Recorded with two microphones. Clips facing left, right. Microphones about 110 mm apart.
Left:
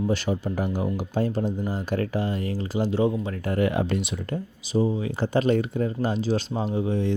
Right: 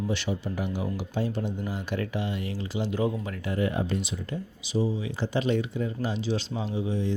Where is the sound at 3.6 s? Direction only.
75° left (ahead or behind).